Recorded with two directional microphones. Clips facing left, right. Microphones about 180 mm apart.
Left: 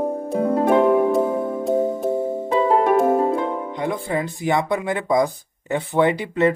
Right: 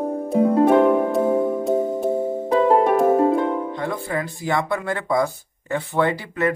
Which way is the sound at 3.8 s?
20° left (ahead or behind).